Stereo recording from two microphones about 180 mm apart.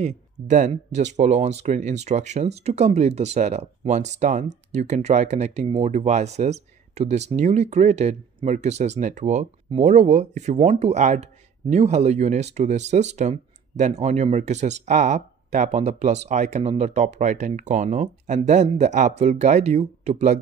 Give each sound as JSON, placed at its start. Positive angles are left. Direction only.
{"t": 0.0, "sound": "speech", "side_deg": -45}